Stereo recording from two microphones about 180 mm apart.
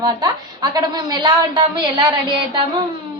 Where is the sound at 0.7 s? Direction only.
20° right (ahead or behind).